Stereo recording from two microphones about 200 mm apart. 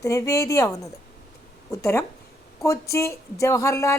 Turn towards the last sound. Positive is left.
turn(degrees=15)  # may be behind; listen again after turning